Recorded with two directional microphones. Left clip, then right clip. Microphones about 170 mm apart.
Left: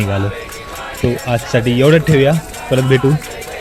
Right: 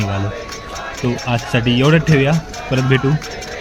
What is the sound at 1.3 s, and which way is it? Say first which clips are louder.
Speech: left 1 dB; 20° left (ahead or behind).